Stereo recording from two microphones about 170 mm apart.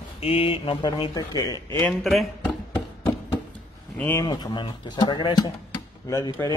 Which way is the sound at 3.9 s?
10° left (ahead or behind).